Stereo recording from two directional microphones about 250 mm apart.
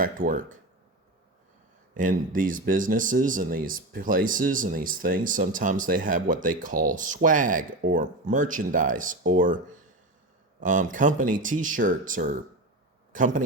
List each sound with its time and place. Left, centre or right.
0.0 s speech: right
2.0 s speech: right